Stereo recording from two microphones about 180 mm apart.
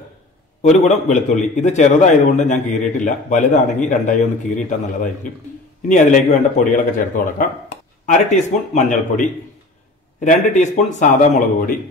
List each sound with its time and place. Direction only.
0.6 s a man's voice: 40° left (ahead or behind)
8.1 s speech: 40° left (ahead or behind)